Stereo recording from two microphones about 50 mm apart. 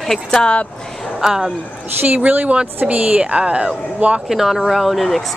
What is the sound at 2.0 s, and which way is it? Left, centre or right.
Speech, right.